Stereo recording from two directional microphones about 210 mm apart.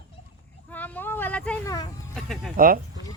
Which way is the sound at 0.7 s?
10° left (ahead or behind).